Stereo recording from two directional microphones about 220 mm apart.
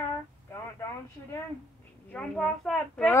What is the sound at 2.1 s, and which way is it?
A woman's voice, centre (ahead or behind).